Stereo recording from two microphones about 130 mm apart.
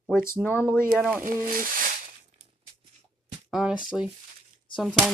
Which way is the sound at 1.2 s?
90° right.